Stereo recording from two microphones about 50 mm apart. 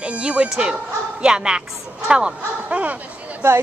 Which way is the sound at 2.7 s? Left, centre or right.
Right.